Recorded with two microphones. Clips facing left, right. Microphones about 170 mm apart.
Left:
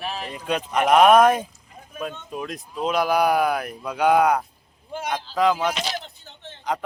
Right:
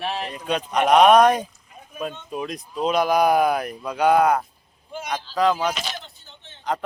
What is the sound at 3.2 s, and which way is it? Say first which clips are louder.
Speech: right 2 dB; 35° right (ahead or behind).